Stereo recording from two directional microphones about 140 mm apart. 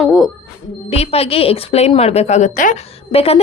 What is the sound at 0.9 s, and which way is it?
A woman's voice, 45° left (ahead or behind).